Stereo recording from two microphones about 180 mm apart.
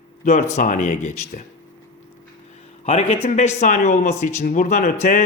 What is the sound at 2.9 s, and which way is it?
Speech, 35° left (ahead or behind).